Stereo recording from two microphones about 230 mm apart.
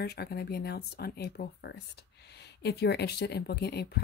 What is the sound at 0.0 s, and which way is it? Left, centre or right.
Speech, left.